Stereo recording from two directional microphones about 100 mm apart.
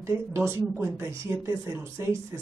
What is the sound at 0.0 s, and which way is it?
Speech, 30° right (ahead or behind).